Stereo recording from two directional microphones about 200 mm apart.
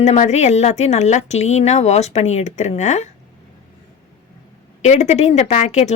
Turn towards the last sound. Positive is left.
turn(degrees=35)  # may be behind; listen again after turning